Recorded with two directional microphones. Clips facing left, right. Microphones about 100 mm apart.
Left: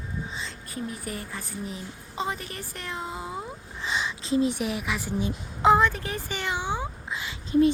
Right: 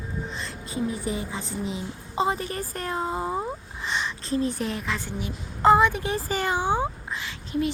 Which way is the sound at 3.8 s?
Centre (ahead or behind).